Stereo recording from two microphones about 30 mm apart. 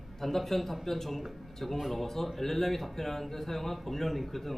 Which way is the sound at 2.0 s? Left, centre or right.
Centre.